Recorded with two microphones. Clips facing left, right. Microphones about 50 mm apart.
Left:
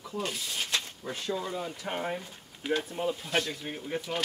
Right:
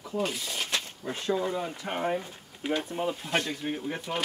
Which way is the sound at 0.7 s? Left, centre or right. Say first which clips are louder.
Right 1 dB; right.